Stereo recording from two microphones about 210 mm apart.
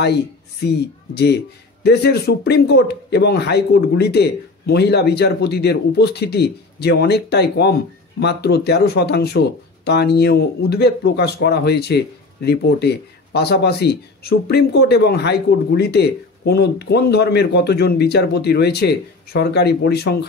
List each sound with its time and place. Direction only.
0.7 s speech: 50° left (ahead or behind)